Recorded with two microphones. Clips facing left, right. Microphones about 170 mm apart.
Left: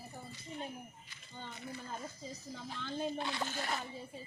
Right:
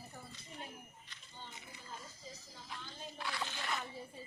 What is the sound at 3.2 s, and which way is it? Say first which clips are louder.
Speech: left 5 dB; 25° left (ahead or behind).